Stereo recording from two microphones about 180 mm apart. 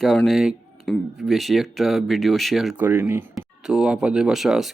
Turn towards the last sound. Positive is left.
turn(degrees=0)  # may be behind; listen again after turning